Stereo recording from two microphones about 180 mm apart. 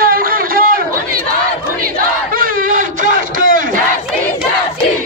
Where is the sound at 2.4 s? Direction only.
50° right (ahead or behind).